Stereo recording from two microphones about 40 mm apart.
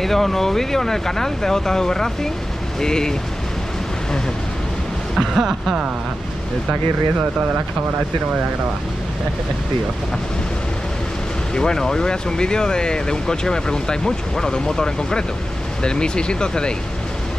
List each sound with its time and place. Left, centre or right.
0.0 s speech: centre
5.2 s speech: centre
11.5 s speech: centre